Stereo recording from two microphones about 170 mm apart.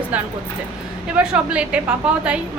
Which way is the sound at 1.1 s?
5° right (ahead or behind).